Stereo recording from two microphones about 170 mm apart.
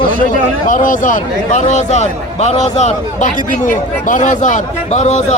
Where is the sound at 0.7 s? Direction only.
50° left (ahead or behind).